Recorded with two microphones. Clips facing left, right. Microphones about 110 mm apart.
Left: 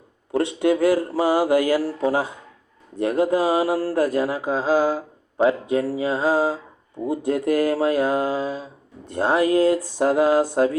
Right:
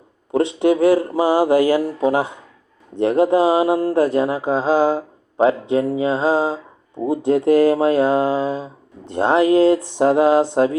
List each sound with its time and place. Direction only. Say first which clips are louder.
0.3 s speech: right 3 dB; 20° right (ahead or behind)